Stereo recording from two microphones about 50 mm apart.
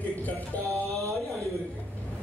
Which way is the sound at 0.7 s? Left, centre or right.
Right.